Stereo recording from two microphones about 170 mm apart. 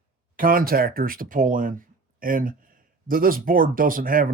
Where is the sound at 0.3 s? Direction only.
55° right (ahead or behind).